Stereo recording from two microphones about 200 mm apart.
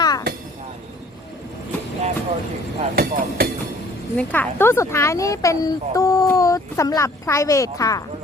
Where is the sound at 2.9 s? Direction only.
50° right (ahead or behind).